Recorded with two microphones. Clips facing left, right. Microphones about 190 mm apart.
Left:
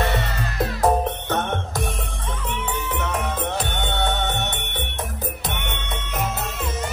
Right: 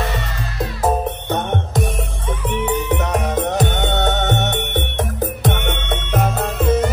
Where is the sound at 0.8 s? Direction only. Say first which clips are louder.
Right 1 dB; 10° right (ahead or behind).